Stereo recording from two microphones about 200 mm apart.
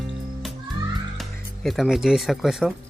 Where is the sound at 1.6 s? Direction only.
Centre (ahead or behind).